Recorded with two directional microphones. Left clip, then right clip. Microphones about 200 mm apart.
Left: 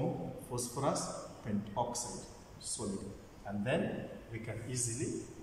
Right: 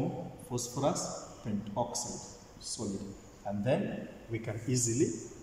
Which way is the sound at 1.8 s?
15° right (ahead or behind).